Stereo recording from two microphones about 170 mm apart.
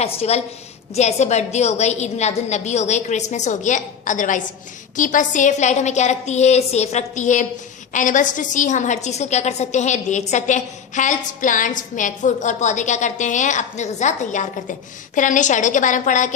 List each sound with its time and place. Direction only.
0.0 s a woman's voice: 40° left (ahead or behind)